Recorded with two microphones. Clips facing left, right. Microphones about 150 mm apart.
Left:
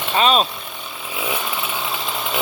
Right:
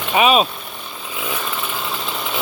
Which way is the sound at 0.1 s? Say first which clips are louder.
Right 2 dB; 10° right (ahead or behind).